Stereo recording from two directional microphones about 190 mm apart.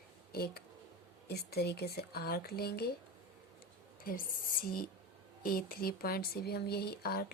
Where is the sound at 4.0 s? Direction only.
50° left (ahead or behind).